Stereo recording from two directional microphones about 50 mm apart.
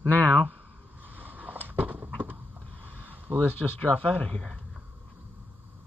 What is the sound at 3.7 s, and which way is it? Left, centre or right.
Speech, left.